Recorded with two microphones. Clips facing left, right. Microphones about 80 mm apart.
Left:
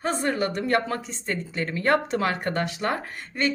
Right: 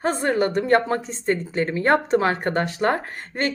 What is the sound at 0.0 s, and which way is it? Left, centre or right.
A woman's voice, right.